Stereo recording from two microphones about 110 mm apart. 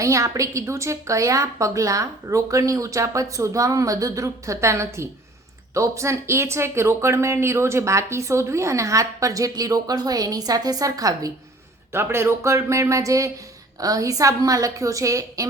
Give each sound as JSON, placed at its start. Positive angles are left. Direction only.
{"t": 0.0, "sound": "a woman's voice", "side_deg": -30}